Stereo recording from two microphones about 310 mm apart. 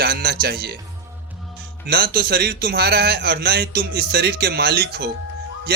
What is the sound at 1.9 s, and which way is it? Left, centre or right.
Speech, right.